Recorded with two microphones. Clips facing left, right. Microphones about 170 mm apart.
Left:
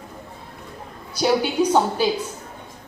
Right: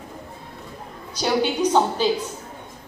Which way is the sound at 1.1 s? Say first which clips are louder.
Left 2 dB; 10° left (ahead or behind).